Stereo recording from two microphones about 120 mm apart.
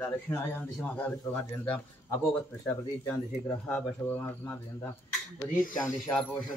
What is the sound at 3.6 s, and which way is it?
Speech, 10° left (ahead or behind).